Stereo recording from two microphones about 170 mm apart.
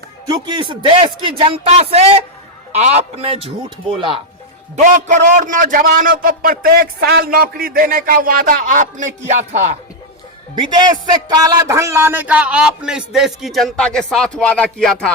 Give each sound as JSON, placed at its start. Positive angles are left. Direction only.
{"t": 0.3, "sound": "speech", "side_deg": -25}
{"t": 4.8, "sound": "a man's voice", "side_deg": -45}
{"t": 10.5, "sound": "a man's voice", "side_deg": -25}